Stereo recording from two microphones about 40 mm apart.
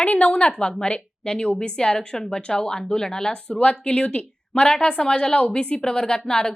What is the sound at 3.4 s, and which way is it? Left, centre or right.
A woman's voice, left.